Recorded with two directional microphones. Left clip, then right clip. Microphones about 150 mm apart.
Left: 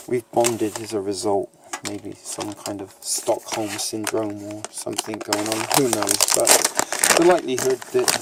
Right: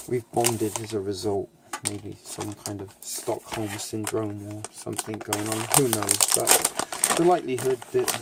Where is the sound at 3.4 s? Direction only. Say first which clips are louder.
Left 6 dB; 60° left (ahead or behind); by 7.3 s 80° left.